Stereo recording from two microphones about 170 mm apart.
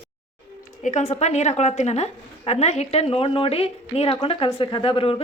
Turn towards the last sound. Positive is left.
turn(degrees=35)  # may be behind; listen again after turning